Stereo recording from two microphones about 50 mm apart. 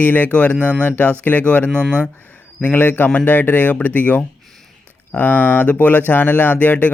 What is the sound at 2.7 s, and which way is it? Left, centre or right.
Speech, left.